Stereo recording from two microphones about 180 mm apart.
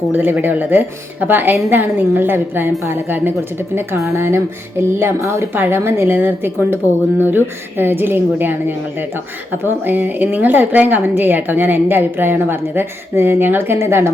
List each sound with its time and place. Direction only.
0.1 s a woman's voice: 10° right (ahead or behind)